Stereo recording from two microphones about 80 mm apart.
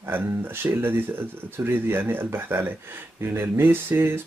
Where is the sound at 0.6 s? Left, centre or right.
Right.